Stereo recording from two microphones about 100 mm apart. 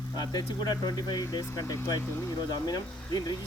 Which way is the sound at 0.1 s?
40° left (ahead or behind).